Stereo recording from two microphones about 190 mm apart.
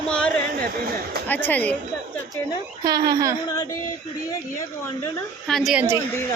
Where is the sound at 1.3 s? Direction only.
10° left (ahead or behind).